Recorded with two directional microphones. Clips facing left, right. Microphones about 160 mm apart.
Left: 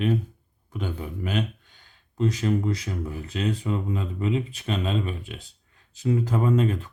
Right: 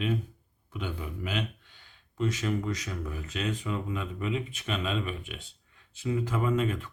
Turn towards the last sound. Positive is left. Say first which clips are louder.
# left 5 dB
turn(degrees=35)  # may be behind; listen again after turning